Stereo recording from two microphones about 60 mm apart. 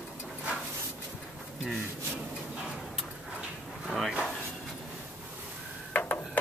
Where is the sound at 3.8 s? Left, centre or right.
Centre.